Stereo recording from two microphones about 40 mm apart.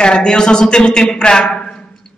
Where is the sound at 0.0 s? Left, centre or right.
Left.